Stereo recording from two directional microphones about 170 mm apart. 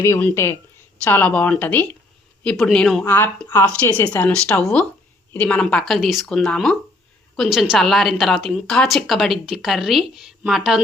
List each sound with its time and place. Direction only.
0.0 s a woman's voice: 15° left (ahead or behind)
3.0 s a woman's voice: 10° left (ahead or behind)